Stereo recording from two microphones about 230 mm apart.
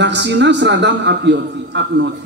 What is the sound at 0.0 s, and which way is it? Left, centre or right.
A man's voice, right.